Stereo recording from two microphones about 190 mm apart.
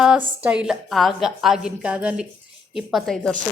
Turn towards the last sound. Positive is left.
turn(degrees=0)  # may be behind; listen again after turning